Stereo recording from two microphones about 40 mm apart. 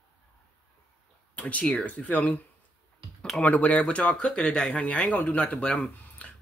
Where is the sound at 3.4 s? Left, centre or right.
Left.